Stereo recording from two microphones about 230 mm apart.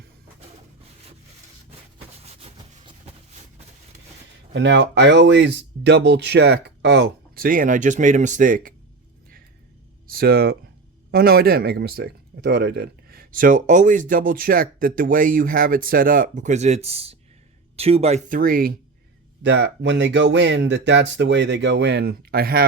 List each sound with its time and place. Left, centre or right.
2.2 s a sound: right
4.5 s speech: right
10.1 s speech: right
19.4 s speech: right